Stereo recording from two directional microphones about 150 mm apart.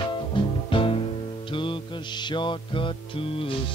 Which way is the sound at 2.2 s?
30° left (ahead or behind).